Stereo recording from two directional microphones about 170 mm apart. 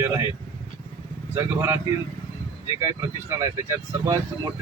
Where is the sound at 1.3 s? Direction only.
15° right (ahead or behind).